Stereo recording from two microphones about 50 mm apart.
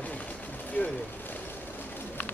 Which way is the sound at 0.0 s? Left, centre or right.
Left.